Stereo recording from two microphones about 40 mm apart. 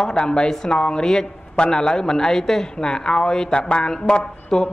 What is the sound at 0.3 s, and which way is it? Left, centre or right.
A man's voice, left.